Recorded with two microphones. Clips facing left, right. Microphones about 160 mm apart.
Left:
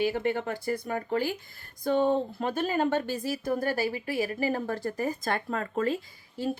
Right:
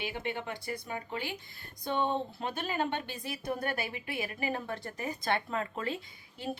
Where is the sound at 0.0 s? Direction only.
45° left (ahead or behind).